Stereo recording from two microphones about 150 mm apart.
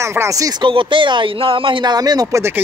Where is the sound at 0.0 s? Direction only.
20° right (ahead or behind).